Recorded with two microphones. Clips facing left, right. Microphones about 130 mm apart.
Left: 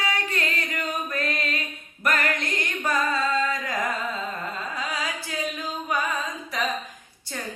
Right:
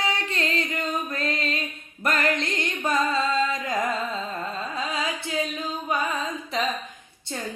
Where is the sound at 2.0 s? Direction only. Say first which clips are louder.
Right 1 dB; 25° right (ahead or behind).